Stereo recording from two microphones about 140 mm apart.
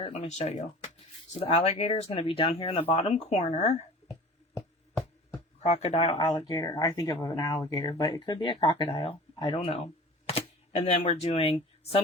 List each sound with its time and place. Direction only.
0.0 s speech: 50° left (ahead or behind)
1.3 s speech: 45° left (ahead or behind)
3.2 s speech: 55° left (ahead or behind)
5.6 s speech: 50° left (ahead or behind)
6.5 s speech: 25° left (ahead or behind); by 11.9 s 45° left (ahead or behind)